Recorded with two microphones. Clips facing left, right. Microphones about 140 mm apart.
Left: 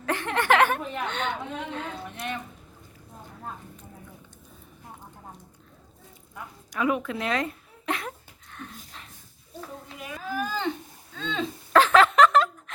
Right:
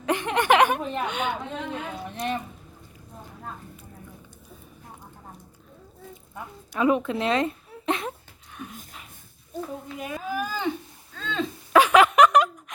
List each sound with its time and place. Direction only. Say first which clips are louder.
0.0 s a woman's voice: right 3 dB; 15° right (ahead or behind)
2.1 s speech: right 7 dB; 35° right (ahead or behind)
6.3 s a woman's voice: right 2 dB; 30° right (ahead or behind)
8.4 s a sound: right 3 dB; 10° right (ahead or behind)
10.2 s speech: left 1 dB; 15° right (ahead or behind)
11.7 s a sound: right 1 dB; 15° right (ahead or behind)